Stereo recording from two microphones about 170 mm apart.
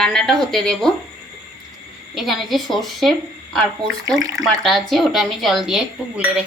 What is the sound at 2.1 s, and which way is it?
Speech, centre (ahead or behind).